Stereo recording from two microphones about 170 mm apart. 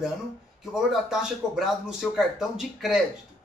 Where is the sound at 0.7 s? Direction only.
Centre (ahead or behind).